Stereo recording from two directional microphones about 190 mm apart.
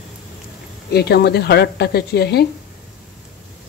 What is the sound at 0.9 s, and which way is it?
A woman's voice, 60° left (ahead or behind).